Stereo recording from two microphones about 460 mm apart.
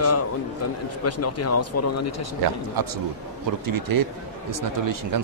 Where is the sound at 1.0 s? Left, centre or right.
Left.